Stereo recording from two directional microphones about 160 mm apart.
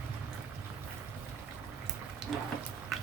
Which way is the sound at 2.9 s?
Centre (ahead or behind).